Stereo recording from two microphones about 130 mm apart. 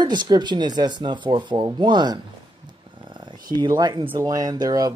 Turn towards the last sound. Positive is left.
turn(degrees=-30)  # may be behind; listen again after turning